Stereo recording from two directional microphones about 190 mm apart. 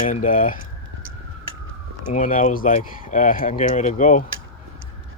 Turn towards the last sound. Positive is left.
turn(degrees=40)  # may be behind; listen again after turning